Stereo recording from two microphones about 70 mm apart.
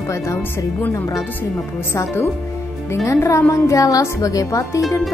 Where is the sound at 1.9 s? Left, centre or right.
Left.